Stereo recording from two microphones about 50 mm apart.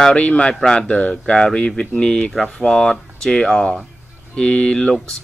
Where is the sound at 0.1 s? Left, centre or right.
Left.